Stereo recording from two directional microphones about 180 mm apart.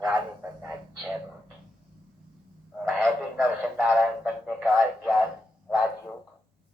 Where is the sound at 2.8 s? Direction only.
10° right (ahead or behind).